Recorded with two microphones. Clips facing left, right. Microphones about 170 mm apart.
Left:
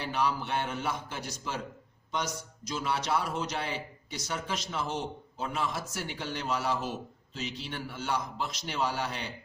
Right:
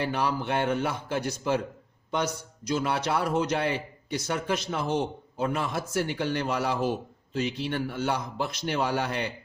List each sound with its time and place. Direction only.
0.0 s a man's voice: 55° right (ahead or behind)